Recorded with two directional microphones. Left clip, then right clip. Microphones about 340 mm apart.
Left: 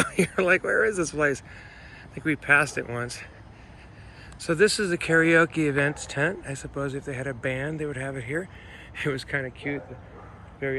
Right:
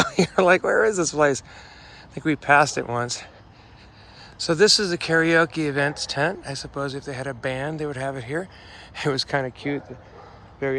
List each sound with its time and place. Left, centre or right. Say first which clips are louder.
0.0 s speech: right 5 dB; centre
4.4 s speech: right 4 dB; centre